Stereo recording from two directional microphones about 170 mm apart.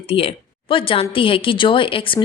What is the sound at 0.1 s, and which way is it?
A woman's voice, 35° left (ahead or behind).